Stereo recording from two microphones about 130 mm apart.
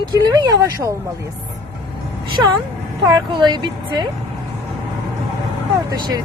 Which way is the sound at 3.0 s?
35° right (ahead or behind).